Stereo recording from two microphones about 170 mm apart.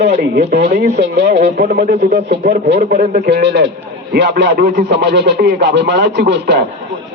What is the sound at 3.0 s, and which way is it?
Speech, 45° right (ahead or behind).